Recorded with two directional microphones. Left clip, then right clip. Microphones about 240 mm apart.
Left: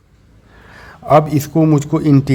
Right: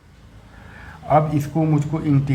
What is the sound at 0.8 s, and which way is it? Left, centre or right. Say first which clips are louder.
A man's voice: left 6 dB; left.